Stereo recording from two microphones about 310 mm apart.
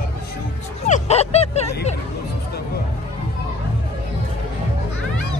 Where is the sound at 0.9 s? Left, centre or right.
Left.